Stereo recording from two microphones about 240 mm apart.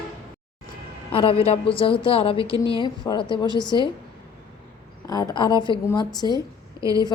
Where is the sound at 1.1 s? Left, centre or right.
Left.